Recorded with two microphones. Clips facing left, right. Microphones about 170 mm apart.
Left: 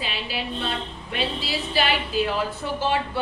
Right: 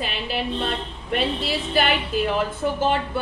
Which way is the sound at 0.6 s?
55° right (ahead or behind).